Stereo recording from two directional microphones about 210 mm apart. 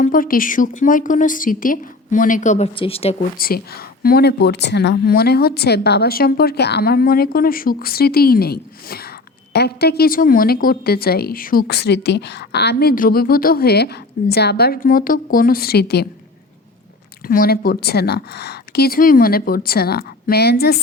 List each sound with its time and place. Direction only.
0.0 s a woman's voice: 40° left (ahead or behind)
3.3 s a woman's voice: 45° left (ahead or behind)
17.2 s a woman's voice: 45° left (ahead or behind)